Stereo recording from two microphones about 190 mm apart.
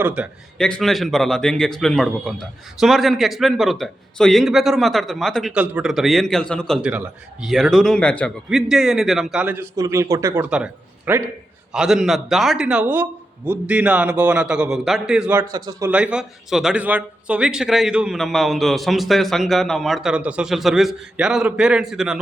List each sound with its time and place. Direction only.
0.0 s a man's voice: 5° right (ahead or behind)
15.5 s speech: 20° right (ahead or behind)
15.9 s a man's voice: 5° right (ahead or behind)